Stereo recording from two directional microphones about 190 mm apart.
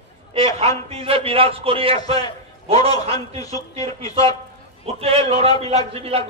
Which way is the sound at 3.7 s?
30° right (ahead or behind).